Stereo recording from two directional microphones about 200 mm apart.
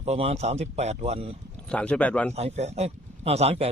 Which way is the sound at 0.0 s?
30° right (ahead or behind).